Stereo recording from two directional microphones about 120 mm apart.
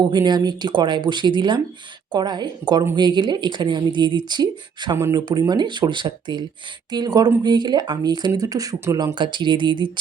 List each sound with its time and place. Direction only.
0.0 s speech: 40° right (ahead or behind)
9.1 s speech: 40° right (ahead or behind)